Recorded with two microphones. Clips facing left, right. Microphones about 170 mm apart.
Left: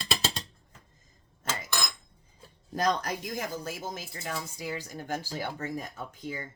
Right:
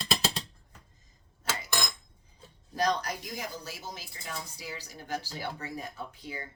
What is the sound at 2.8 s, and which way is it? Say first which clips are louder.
Speech: left 1 dB; 50° left (ahead or behind).